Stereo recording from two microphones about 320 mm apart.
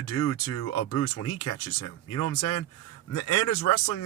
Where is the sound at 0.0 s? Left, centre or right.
Left.